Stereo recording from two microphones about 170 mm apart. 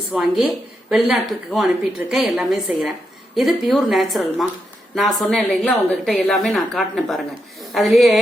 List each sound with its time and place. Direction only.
0.1 s a woman's voice: 5° right (ahead or behind)